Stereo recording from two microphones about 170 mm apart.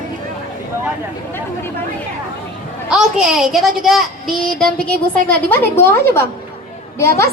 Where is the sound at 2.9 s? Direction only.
5° right (ahead or behind).